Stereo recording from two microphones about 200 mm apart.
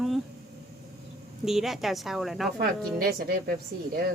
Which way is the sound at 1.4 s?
Centre (ahead or behind).